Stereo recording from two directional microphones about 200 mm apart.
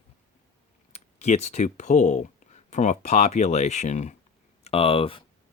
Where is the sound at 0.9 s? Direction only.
35° left (ahead or behind).